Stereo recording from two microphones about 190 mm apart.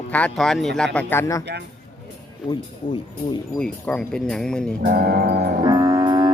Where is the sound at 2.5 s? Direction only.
20° left (ahead or behind).